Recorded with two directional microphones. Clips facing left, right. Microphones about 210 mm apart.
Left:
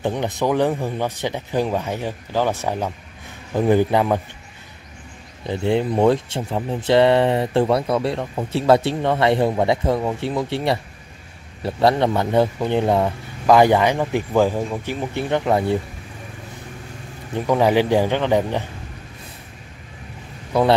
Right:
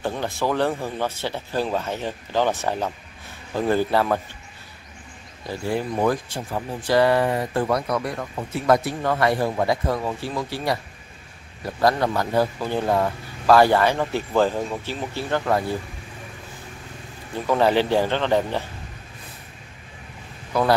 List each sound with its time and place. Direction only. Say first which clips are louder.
0.0 s speech: left 3 dB; 20° left (ahead or behind)
5.5 s speech: left 6 dB; 25° left (ahead or behind)
17.3 s speech: left 2 dB; 15° left (ahead or behind)